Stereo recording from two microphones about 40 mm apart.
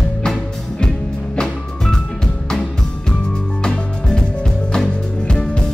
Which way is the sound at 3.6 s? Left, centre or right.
Centre.